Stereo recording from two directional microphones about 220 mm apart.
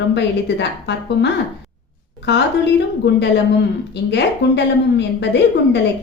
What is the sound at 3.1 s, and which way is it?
A woman's voice, 50° left (ahead or behind).